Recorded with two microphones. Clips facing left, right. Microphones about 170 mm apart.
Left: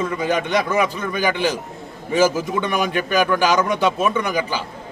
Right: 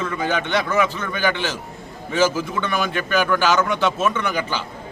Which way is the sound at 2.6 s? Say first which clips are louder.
Left 2 dB; 10° left (ahead or behind).